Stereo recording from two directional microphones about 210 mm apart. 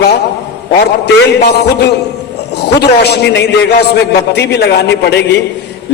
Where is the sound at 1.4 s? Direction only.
50° left (ahead or behind).